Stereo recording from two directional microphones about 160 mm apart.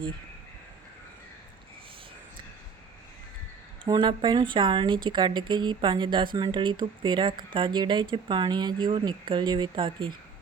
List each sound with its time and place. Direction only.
3.8 s speech: 30° right (ahead or behind)